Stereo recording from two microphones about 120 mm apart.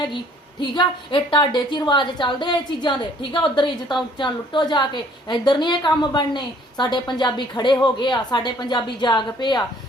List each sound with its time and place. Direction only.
0.6 s a woman's voice: 40° left (ahead or behind)